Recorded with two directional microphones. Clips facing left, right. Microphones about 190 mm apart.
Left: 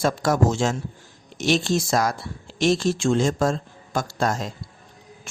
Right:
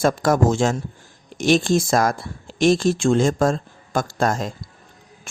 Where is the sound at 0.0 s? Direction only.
50° right (ahead or behind).